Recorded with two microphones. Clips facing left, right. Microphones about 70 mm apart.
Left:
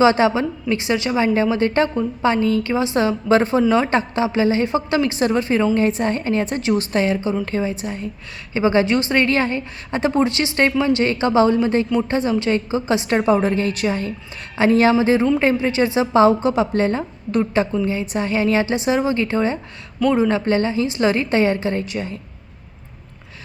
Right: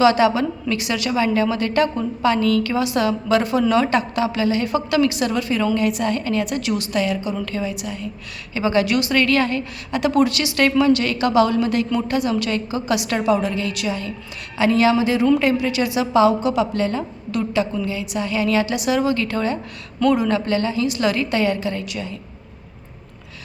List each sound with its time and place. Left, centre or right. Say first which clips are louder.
0.0 s a woman's voice: even; left